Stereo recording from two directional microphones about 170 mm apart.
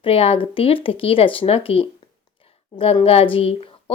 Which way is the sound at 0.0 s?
35° left (ahead or behind).